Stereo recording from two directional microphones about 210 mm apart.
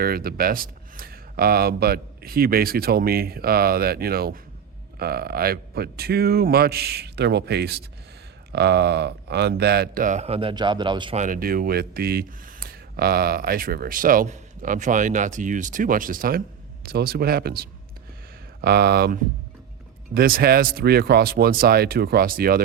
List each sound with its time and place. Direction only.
0.0 s speech: 45° right (ahead or behind); by 11.2 s 20° right (ahead or behind)
11.2 s speech: 40° right (ahead or behind)